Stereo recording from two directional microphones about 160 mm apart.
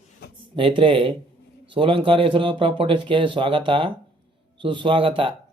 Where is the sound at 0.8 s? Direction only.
35° right (ahead or behind).